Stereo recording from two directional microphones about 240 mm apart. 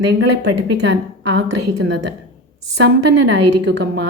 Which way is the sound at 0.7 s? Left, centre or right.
Right.